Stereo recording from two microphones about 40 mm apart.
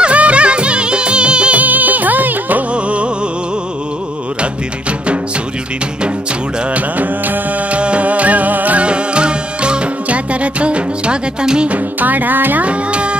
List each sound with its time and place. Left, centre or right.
0.0 s music: right
1.6 s music: right
2.7 s music: right
6.7 s music: right
8.8 s music: right
11.7 s music: right
12.6 s music: right